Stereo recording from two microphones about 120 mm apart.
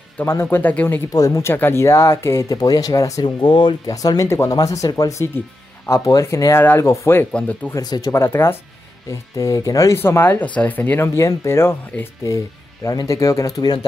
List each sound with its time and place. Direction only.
0.2 s speech: 20° left (ahead or behind)
1.1 s speech: 30° left (ahead or behind)
3.8 s speech: 30° left (ahead or behind); by 7.7 s 15° left (ahead or behind)
7.7 s speech: 30° left (ahead or behind)